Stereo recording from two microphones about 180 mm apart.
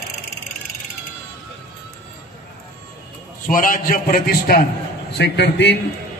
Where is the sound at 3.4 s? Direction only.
50° left (ahead or behind).